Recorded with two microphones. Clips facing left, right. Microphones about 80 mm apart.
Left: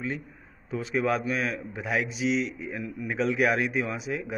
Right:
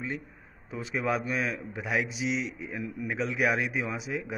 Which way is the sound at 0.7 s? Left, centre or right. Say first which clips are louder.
Left 4 dB; centre.